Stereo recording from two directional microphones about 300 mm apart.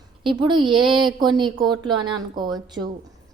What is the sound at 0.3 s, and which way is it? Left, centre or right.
A woman's voice, centre.